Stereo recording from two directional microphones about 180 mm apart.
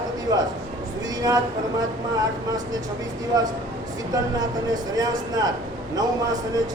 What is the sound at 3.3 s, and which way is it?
A man's voice, 20° right (ahead or behind).